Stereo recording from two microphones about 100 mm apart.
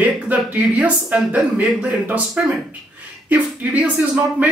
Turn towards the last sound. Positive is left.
turn(degrees=-15)  # may be behind; listen again after turning